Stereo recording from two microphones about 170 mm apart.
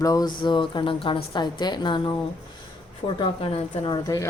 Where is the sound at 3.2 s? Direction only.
25° left (ahead or behind).